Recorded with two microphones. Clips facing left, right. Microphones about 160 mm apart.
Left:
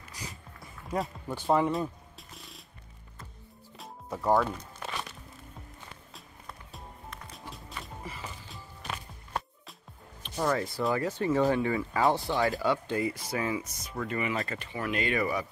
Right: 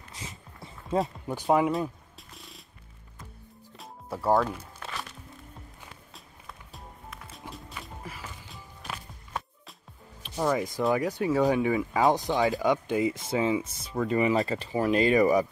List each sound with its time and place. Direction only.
0.1 s walk: 25° right (ahead or behind)
1.2 s a sound: 15° right (ahead or behind)
3.7 s music: 5° right (ahead or behind)
6.1 s music: centre (ahead or behind)
10.2 s speech: 10° right (ahead or behind); by 15.4 s 40° right (ahead or behind)